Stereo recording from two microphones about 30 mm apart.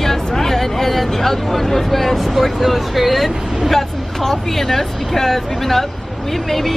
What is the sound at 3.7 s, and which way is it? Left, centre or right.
Speech, centre.